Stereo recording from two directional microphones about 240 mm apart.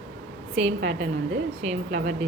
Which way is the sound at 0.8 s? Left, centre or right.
Right.